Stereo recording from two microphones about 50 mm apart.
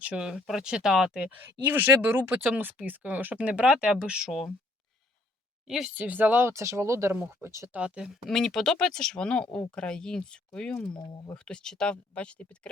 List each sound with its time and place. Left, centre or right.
0.2 s speech: centre
1.4 s speech: right
2.3 s speech: right; by 4.3 s centre
4.3 s speech: centre
5.6 s a woman's voice: centre
5.9 s speech: right
6.4 s speech: right
7.7 s speech: right
8.3 s speech: centre; by 12.5 s left